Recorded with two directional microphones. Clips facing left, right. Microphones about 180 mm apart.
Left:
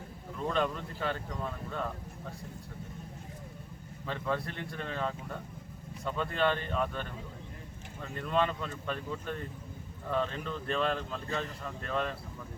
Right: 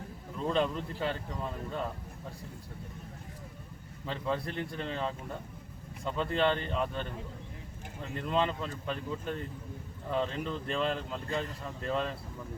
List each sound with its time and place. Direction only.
0.4 s speech: 25° right (ahead or behind)
4.0 s speech: 25° right (ahead or behind)
8.1 s speech: 25° right (ahead or behind)